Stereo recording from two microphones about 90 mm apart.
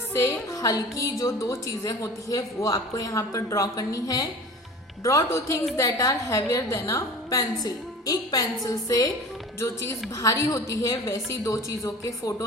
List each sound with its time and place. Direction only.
0.1 s a woman's voice: 30° left (ahead or behind)